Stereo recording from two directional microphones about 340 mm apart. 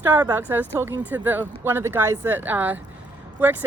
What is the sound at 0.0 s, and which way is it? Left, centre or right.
A woman's voice, centre.